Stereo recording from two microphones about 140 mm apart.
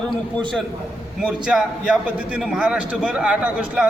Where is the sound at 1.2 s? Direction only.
5° right (ahead or behind).